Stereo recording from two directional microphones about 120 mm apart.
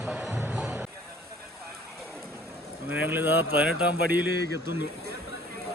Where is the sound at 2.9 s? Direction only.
15° right (ahead or behind).